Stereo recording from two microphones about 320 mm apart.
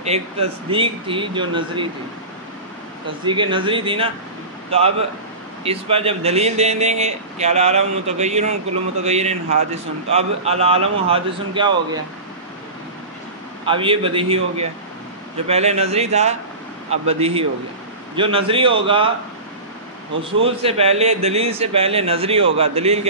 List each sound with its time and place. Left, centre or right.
0.0 s speech: centre
3.3 s a man's voice: centre
13.7 s speech: centre
20.3 s speech: centre